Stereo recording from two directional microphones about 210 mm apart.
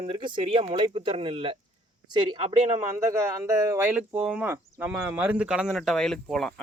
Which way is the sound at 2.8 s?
10° right (ahead or behind).